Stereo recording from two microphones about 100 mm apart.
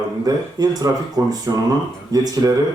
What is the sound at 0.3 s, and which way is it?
Speech, 40° right (ahead or behind).